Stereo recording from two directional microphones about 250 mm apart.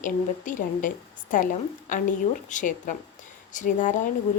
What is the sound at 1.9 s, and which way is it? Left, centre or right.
A woman's voice, left.